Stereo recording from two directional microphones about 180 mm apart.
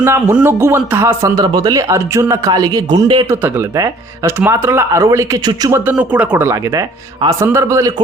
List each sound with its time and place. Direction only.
0.0 s speech: 15° right (ahead or behind)